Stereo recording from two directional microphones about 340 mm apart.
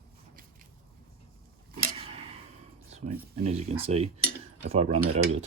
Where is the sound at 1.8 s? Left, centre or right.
Centre.